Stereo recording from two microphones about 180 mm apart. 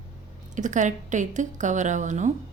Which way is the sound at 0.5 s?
45° right (ahead or behind).